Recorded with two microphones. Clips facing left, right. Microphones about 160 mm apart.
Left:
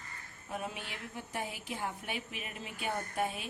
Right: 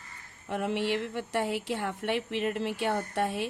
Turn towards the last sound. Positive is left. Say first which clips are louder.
# right 6 dB
turn(degrees=-75)  # may be behind; listen again after turning